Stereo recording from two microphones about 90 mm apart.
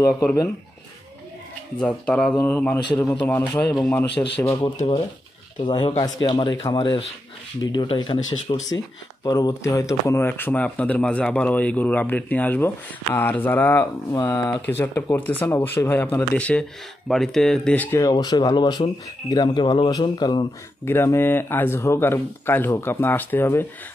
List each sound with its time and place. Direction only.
1.8 s speech: 10° left (ahead or behind)
2.3 s speech: 20° left (ahead or behind)
3.9 s speech: 35° left (ahead or behind)
4.6 s speech: 60° left (ahead or behind)
8.6 s speech: 45° left (ahead or behind)
10.2 s speech: 25° left (ahead or behind)
14.3 s speech: 40° left (ahead or behind)
14.7 s speech: 25° left (ahead or behind)
17.1 s speech: 5° left (ahead or behind)
18.1 s speech: 45° left (ahead or behind)
20.8 s speech: 25° left (ahead or behind)